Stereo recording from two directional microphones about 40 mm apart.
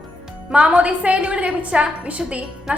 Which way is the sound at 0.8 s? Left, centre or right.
Right.